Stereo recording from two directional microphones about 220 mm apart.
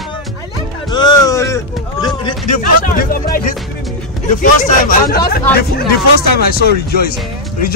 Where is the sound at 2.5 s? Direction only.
40° left (ahead or behind).